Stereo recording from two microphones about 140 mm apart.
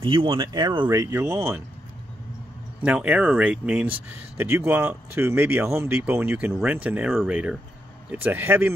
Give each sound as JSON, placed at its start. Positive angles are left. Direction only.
{"t": 0.0, "sound": "speech", "side_deg": -40}
{"t": 0.8, "sound": "speech", "side_deg": -15}
{"t": 2.8, "sound": "speech", "side_deg": -10}